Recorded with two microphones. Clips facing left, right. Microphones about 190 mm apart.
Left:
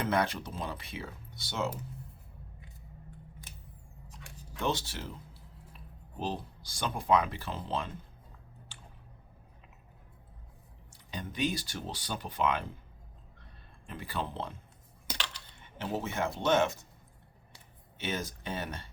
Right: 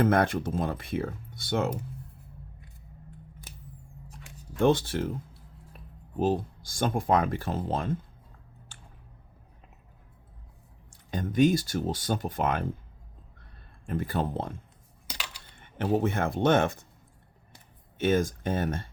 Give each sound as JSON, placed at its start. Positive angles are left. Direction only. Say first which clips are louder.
{"t": 0.0, "sound": "speech", "louder": "right 7 dB", "side_deg": -50}
{"t": 4.1, "sound": "a sound", "louder": "right 1 dB", "side_deg": -55}
{"t": 6.1, "sound": "speech", "louder": "right 10 dB", "side_deg": -45}
{"t": 10.9, "sound": "speech", "louder": "right 12 dB", "side_deg": -50}
{"t": 13.8, "sound": "speech", "louder": "right 8 dB", "side_deg": -45}
{"t": 15.5, "sound": "speech", "louder": "right 9 dB", "side_deg": -55}
{"t": 17.9, "sound": "speech", "louder": "right 11 dB", "side_deg": -50}